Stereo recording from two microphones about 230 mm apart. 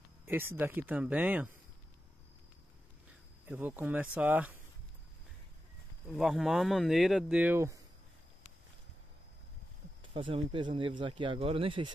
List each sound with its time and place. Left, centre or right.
0.2 s speech: centre
3.4 s speech: centre
6.0 s speech: centre
10.1 s speech: right